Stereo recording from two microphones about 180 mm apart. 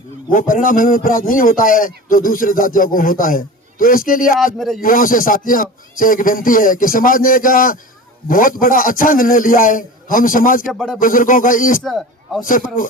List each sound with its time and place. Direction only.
0.3 s a man's voice: 45° left (ahead or behind)
4.5 s speech: centre (ahead or behind)
4.8 s a man's voice: 50° left (ahead or behind)
10.7 s speech: centre (ahead or behind)
11.0 s a man's voice: 50° left (ahead or behind)
11.8 s a man's voice: centre (ahead or behind)
12.4 s a man's voice: 50° left (ahead or behind)